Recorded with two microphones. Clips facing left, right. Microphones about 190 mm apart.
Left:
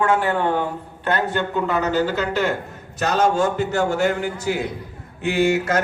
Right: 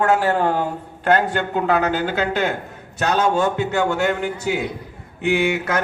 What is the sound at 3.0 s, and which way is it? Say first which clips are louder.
A man's voice: even; 60° right (ahead or behind).